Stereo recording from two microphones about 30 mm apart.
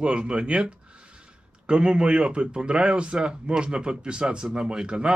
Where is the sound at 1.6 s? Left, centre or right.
Right.